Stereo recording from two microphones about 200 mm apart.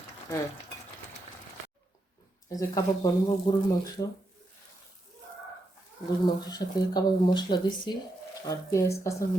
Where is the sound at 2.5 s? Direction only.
15° left (ahead or behind).